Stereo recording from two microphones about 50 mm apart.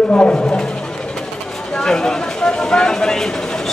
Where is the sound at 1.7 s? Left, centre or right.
Centre.